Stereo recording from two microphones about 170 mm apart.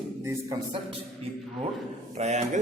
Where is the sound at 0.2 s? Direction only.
20° right (ahead or behind).